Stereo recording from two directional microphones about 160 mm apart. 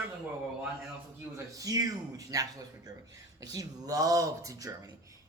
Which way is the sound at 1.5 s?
20° right (ahead or behind).